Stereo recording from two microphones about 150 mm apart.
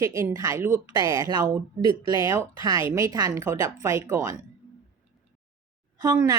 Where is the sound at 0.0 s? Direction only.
20° right (ahead or behind).